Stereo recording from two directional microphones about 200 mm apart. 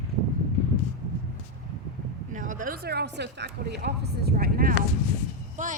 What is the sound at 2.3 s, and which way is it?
Speech, 40° right (ahead or behind).